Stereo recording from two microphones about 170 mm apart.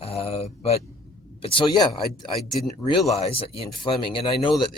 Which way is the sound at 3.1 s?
35° left (ahead or behind).